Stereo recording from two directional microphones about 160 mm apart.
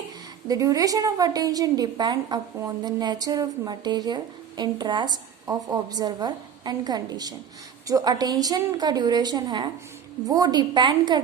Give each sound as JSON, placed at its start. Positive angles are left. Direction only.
{"t": 0.4, "sound": "a woman's voice", "side_deg": -25}